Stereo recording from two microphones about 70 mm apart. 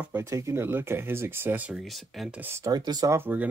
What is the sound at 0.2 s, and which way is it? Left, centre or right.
Speech, right.